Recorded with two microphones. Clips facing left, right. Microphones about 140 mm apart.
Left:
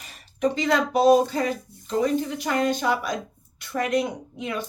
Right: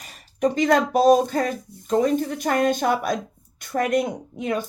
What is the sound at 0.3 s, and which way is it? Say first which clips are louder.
Speech: right 3 dB; 45° right (ahead or behind).